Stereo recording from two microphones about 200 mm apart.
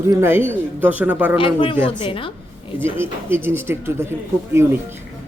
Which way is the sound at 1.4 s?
25° left (ahead or behind).